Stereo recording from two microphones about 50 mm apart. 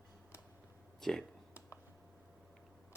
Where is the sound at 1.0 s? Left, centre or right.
Centre.